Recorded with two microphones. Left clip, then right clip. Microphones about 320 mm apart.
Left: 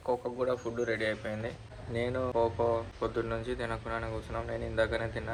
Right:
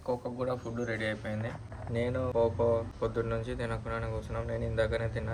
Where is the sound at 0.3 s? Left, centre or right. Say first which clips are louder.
Left 3 dB; centre.